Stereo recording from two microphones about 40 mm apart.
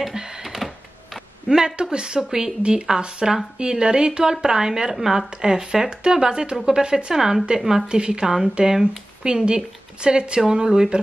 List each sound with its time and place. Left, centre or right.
0.4 s a sound: centre
1.5 s a woman's voice: centre
7.2 s a woman's voice: centre